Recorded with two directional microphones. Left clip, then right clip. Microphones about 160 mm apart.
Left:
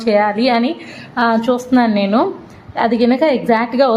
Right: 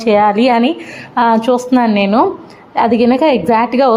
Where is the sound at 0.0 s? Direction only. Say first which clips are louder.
Right 4 dB; 20° right (ahead or behind).